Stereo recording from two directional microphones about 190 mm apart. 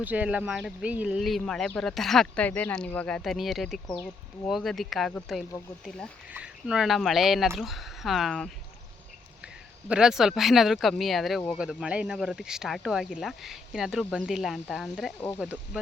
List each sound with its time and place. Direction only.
0.0 s speech: 10° right (ahead or behind)
9.9 s speech: 5° right (ahead or behind)